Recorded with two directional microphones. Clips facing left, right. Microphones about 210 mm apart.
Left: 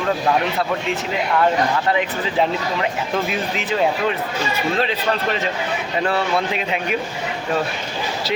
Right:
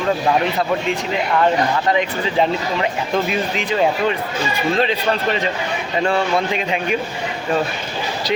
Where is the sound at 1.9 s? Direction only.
5° left (ahead or behind).